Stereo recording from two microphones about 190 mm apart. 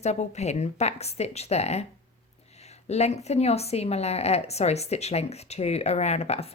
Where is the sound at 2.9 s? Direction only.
35° left (ahead or behind).